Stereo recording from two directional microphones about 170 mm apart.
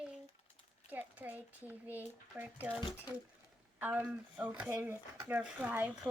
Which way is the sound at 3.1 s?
25° left (ahead or behind).